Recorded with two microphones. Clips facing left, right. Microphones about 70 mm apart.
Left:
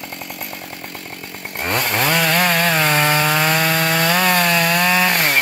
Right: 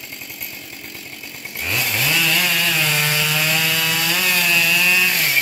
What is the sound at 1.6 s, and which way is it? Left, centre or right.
Chainsaw, left.